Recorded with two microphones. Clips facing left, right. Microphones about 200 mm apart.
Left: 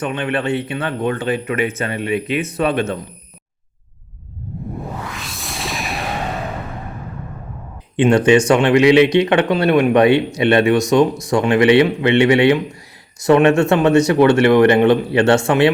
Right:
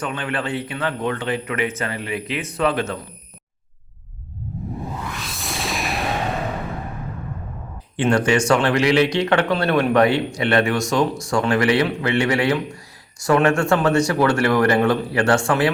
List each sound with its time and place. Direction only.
0.0 s speech: 25° left (ahead or behind)
5.1 s music: centre (ahead or behind)
7.9 s speech: 20° left (ahead or behind)